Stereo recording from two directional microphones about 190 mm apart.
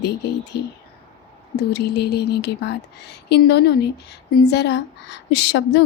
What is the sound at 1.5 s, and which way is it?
Speech, 60° left (ahead or behind).